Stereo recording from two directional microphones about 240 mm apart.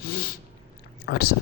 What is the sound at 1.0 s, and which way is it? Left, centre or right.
Speech, left.